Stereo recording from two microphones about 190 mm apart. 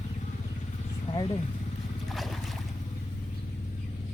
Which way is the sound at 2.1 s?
Centre (ahead or behind).